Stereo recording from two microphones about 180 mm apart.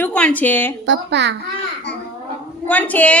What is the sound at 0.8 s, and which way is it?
Speech, 80° right.